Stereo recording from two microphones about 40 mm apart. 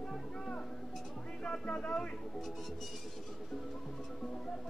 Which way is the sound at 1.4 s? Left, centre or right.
Left.